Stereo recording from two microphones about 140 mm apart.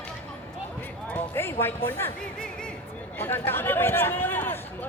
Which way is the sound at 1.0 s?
15° left (ahead or behind).